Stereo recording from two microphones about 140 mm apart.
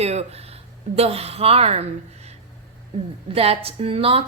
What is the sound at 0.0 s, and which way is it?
Speech, 50° right (ahead or behind).